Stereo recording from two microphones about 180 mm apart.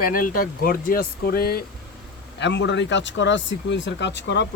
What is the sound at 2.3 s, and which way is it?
Speech, 75° left (ahead or behind).